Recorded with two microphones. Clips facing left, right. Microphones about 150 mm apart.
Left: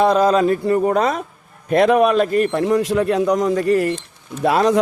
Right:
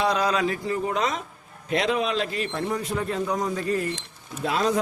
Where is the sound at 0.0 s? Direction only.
45° left (ahead or behind).